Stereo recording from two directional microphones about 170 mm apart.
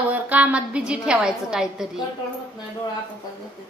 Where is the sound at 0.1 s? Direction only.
10° right (ahead or behind).